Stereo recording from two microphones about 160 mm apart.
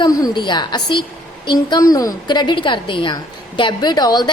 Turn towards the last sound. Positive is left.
turn(degrees=25)  # may be behind; listen again after turning